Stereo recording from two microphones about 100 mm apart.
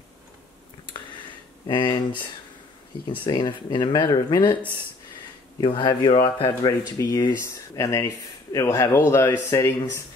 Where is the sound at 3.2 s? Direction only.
50° left (ahead or behind).